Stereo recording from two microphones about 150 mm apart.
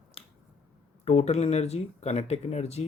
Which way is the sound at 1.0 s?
45° left (ahead or behind).